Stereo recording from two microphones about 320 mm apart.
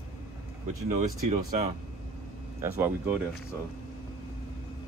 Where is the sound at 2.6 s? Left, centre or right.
Centre.